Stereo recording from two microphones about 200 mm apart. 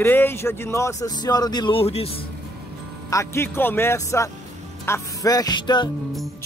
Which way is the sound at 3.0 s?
15° left (ahead or behind).